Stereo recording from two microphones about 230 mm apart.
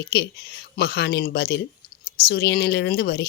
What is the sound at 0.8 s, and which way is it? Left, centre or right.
Speech, left.